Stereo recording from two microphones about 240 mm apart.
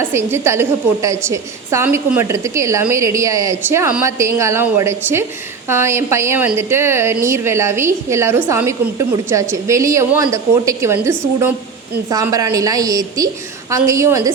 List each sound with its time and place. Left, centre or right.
0.1 s a woman's voice: centre